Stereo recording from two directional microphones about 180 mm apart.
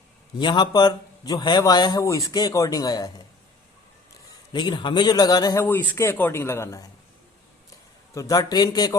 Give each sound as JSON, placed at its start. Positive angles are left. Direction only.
{"t": 0.3, "sound": "a man's voice", "side_deg": 25}
{"t": 4.5, "sound": "a man's voice", "side_deg": 25}
{"t": 5.6, "sound": "speech", "side_deg": 10}
{"t": 8.1, "sound": "a man's voice", "side_deg": 20}